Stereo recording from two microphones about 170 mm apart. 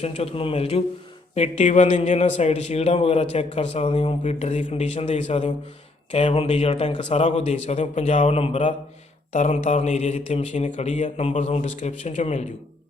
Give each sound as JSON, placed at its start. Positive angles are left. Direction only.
{"t": 0.0, "sound": "a man's voice", "side_deg": 35}